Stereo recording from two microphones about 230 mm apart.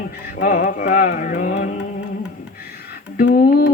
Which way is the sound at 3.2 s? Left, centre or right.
Left.